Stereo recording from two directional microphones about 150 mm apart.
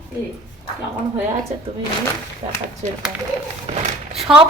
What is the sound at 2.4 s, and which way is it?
Speech, 45° right (ahead or behind).